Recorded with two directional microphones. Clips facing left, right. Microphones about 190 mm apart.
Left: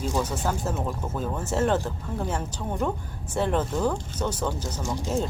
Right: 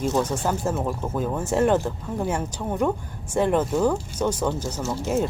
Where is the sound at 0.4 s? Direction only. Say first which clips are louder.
Right 3 dB; 10° right (ahead or behind).